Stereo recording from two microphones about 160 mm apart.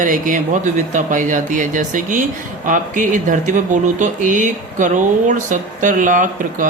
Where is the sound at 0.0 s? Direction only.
55° right (ahead or behind).